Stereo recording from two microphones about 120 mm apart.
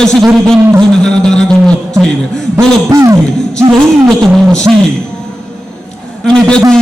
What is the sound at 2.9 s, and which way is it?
Speech, 30° right (ahead or behind).